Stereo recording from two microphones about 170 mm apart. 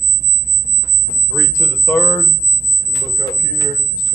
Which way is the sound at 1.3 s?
15° left (ahead or behind).